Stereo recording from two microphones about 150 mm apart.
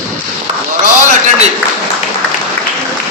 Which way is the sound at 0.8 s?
55° right (ahead or behind).